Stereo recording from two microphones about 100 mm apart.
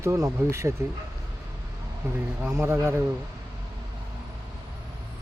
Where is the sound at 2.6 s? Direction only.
25° right (ahead or behind).